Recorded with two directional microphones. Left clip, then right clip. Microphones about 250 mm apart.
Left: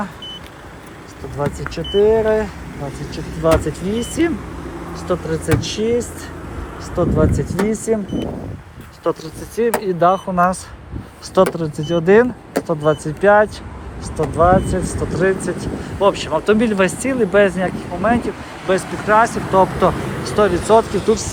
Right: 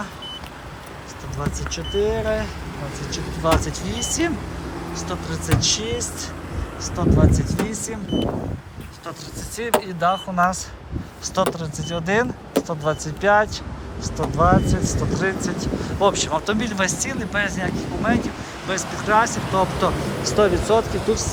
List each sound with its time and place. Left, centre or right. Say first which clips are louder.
1.4 s speech: left 6 dB; centre
9.6 s speech: left 6 dB; centre